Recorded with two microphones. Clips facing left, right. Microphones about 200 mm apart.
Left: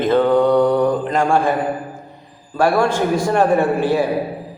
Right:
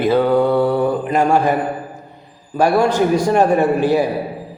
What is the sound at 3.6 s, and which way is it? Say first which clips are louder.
Speech: right 2 dB; 40° right (ahead or behind).